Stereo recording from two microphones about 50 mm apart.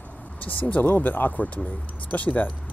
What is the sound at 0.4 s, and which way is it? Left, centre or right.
Speech, left.